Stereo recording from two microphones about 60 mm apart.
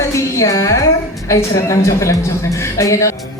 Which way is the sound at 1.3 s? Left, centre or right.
Left.